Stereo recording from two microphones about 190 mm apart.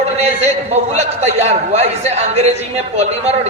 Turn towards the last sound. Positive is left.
turn(degrees=-35)  # may be behind; listen again after turning